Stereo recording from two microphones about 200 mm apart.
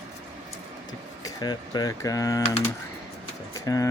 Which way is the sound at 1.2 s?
20° left (ahead or behind).